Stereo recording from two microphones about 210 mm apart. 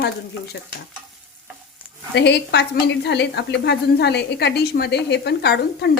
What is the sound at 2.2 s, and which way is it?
A woman's voice, 55° left (ahead or behind).